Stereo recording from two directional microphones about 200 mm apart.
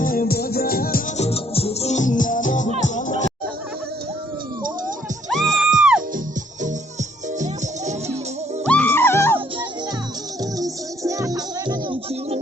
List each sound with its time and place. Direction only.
0.0 s music: 45° left (ahead or behind)
1.1 s music: 30° left (ahead or behind)
5.3 s music: centre (ahead or behind)
8.6 s music: 5° left (ahead or behind)
10.6 s music: 15° right (ahead or behind)